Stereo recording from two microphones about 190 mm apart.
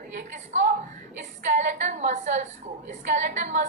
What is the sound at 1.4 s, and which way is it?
A woman's voice, 40° right (ahead or behind).